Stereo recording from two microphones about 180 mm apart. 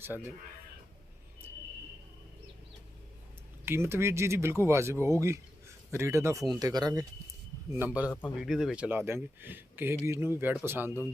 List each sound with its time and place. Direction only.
3.7 s speech: 15° right (ahead or behind)
7.7 s speech: 10° right (ahead or behind)
8.0 s a man's voice: 10° left (ahead or behind)
8.4 s speech: centre (ahead or behind)